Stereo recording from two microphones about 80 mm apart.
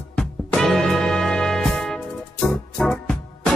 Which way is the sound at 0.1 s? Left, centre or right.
Centre.